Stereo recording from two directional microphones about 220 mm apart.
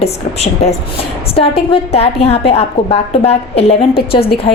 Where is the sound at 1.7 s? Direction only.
25° left (ahead or behind).